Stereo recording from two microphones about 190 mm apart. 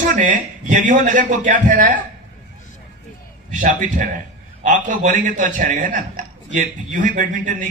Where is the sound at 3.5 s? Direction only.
40° right (ahead or behind).